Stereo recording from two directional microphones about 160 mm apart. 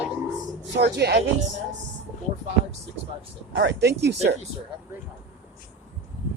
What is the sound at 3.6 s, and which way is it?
Speech, 90° right.